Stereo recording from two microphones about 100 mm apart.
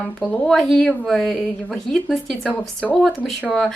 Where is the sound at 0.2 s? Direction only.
5° left (ahead or behind).